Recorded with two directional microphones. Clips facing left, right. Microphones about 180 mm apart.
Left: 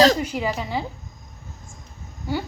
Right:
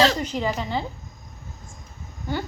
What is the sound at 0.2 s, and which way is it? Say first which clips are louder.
Speech: left 1 dB; 10° left (ahead or behind).